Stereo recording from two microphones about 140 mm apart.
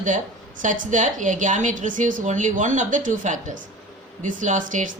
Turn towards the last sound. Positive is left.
turn(degrees=-70)  # may be behind; listen again after turning